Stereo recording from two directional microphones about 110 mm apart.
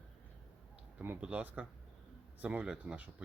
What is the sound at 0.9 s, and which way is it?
Speech, 15° right (ahead or behind).